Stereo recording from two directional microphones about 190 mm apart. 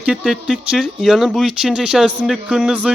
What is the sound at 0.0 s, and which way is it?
Speech, 5° right (ahead or behind).